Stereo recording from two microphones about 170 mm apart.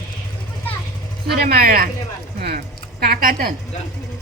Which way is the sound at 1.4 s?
65° right (ahead or behind).